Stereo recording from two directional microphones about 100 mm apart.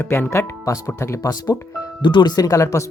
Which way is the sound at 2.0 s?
50° left (ahead or behind).